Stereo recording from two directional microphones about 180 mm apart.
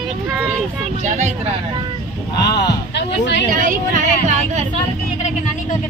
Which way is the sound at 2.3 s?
65° left (ahead or behind).